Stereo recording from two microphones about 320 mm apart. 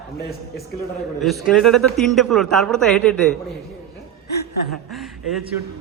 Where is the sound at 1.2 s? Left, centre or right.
Centre.